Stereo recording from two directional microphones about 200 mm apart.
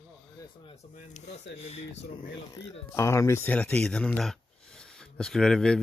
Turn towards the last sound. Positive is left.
turn(degrees=5)  # may be behind; listen again after turning